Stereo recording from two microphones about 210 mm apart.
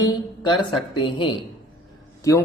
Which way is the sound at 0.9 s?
25° left (ahead or behind).